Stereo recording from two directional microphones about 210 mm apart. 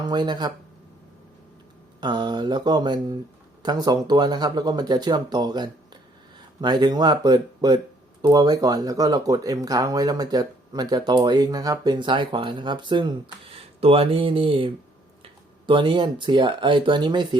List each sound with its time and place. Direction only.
0.0 s speech: 20° right (ahead or behind)
2.0 s speech: 20° right (ahead or behind)